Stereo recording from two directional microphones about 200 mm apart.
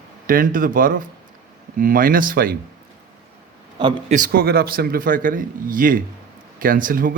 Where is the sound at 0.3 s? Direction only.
45° right (ahead or behind).